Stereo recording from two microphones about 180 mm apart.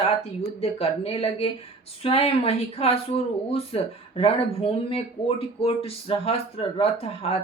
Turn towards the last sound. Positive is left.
turn(degrees=35)  # may be behind; listen again after turning